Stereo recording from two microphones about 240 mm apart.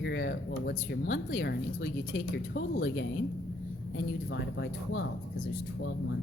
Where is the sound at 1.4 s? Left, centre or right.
Left.